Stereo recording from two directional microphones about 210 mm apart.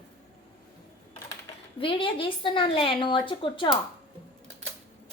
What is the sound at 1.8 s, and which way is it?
A woman's voice, 25° left (ahead or behind).